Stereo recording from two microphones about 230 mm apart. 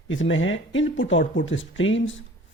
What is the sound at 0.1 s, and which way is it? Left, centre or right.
Speech, left.